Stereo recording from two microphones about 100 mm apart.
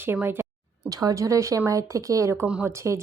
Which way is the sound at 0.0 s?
25° right (ahead or behind).